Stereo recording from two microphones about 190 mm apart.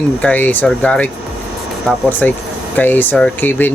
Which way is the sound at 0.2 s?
10° left (ahead or behind).